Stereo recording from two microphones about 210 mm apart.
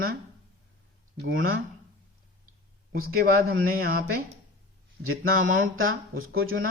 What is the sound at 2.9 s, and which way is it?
Speech, 45° right (ahead or behind).